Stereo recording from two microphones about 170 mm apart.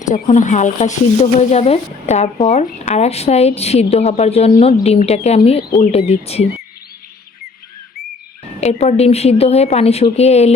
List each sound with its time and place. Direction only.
0.1 s speech: 45° left (ahead or behind)
8.6 s speech: 40° left (ahead or behind)